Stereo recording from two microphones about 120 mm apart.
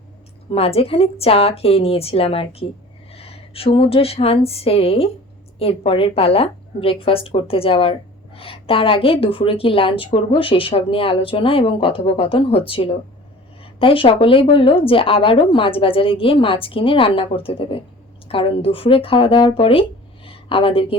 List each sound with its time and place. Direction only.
0.5 s a woman's voice: 55° left (ahead or behind)